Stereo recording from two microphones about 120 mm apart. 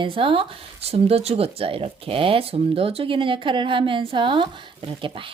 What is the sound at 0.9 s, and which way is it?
Speech, 55° right (ahead or behind).